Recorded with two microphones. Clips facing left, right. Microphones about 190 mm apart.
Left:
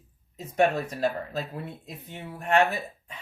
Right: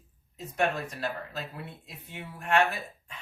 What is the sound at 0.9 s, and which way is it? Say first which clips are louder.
Speech: left 7 dB; 40° left (ahead or behind).